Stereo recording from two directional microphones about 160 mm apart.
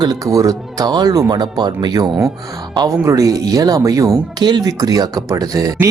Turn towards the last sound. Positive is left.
turn(degrees=-20)  # may be behind; listen again after turning